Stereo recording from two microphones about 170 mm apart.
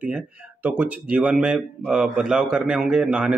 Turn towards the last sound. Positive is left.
turn(degrees=-5)  # may be behind; listen again after turning